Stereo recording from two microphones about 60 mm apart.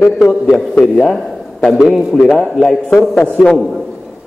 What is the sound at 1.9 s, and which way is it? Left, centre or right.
A man's voice, centre.